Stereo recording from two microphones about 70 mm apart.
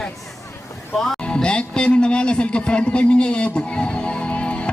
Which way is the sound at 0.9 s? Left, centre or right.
Centre.